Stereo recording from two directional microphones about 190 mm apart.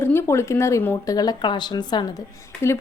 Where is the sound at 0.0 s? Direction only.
10° left (ahead or behind).